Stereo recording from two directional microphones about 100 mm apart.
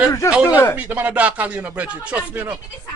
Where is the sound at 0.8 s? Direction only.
15° right (ahead or behind).